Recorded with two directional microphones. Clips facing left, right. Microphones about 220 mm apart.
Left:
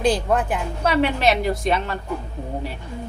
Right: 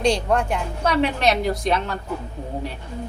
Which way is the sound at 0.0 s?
5° left (ahead or behind).